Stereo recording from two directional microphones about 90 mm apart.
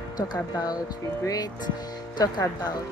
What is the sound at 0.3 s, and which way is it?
Speech, 45° left (ahead or behind).